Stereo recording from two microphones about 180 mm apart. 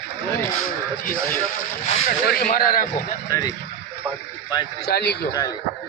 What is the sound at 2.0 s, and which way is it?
Speech, 55° left (ahead or behind).